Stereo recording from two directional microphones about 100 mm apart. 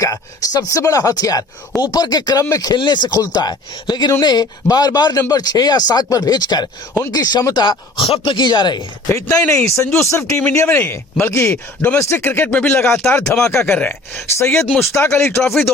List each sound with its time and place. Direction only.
0.0 s speech: 35° left (ahead or behind)
8.0 s speech: 75° left (ahead or behind)
8.3 s speech: 50° left (ahead or behind)
9.5 s speech: 30° left (ahead or behind); by 13.0 s 10° left (ahead or behind)
13.0 s speech: 25° left (ahead or behind)